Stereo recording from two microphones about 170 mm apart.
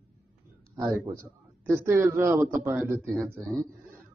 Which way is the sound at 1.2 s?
15° right (ahead or behind).